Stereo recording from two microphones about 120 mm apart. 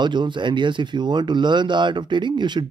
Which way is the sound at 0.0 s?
40° right (ahead or behind).